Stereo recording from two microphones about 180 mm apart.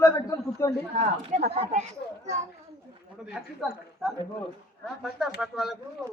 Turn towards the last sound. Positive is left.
turn(degrees=0)  # may be behind; listen again after turning